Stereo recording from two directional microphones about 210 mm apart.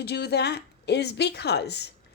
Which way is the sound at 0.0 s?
50° left (ahead or behind).